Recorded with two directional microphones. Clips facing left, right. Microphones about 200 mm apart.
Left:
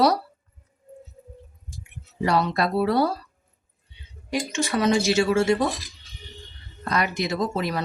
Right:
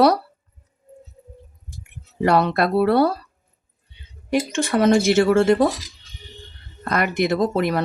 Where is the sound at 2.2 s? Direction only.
60° right (ahead or behind).